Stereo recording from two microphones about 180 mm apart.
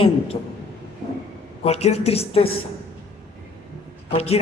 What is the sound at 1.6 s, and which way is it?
Speech, 35° left (ahead or behind).